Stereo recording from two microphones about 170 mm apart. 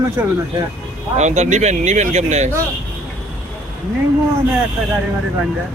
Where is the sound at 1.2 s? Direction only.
45° right (ahead or behind).